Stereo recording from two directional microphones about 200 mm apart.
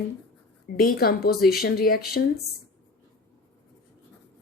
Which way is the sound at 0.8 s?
50° left (ahead or behind).